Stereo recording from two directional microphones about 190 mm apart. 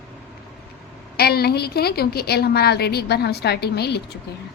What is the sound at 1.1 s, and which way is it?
A woman's voice, 55° left (ahead or behind).